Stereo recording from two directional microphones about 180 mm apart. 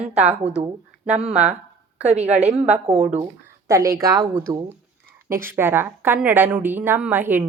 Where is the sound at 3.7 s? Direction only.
15° right (ahead or behind).